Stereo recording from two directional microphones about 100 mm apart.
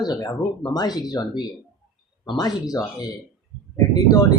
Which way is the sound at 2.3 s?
40° left (ahead or behind).